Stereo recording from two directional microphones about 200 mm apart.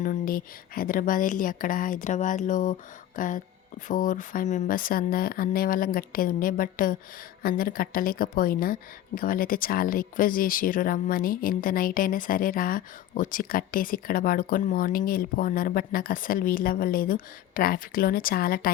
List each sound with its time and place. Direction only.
0.0 s a woman's voice: 45° left (ahead or behind)